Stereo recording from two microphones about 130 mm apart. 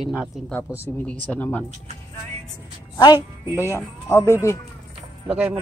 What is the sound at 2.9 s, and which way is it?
Speech, 35° left (ahead or behind).